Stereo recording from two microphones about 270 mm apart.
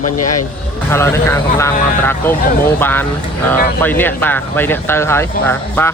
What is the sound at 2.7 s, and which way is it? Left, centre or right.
Speech, centre.